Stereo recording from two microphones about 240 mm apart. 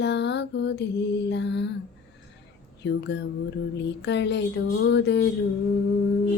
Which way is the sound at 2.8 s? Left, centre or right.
Left.